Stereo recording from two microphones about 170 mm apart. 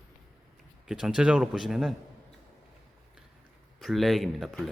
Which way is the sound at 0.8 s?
5° right (ahead or behind).